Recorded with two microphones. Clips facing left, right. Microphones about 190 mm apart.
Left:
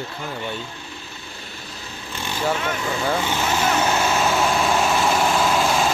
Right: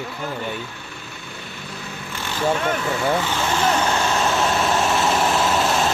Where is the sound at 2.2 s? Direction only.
15° left (ahead or behind).